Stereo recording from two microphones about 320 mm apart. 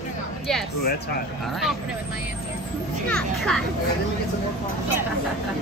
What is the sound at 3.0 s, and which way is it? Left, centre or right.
Speech, centre.